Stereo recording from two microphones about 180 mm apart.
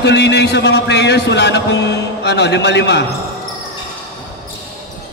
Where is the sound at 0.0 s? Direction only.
70° left (ahead or behind).